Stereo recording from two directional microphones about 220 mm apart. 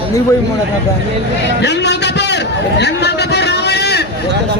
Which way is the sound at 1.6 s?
50° left (ahead or behind).